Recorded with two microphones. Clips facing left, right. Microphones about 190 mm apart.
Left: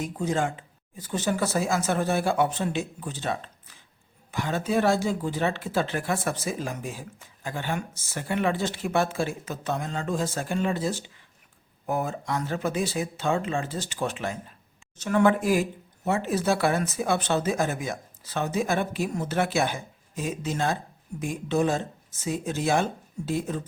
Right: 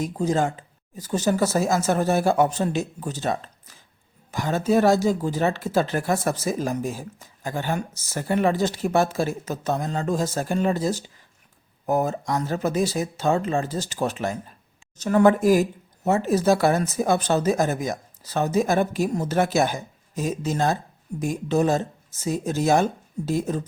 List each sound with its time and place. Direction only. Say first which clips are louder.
0.0 s speech: right 4 dB; 40° right (ahead or behind)